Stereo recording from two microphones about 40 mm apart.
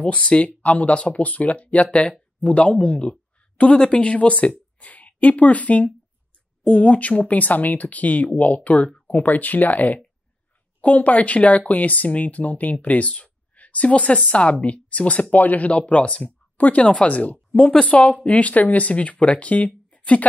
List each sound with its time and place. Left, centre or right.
0.4 s speech: left
13.2 s a sound: left
14.3 s speech: left
16.5 s speech: left
16.8 s speech: left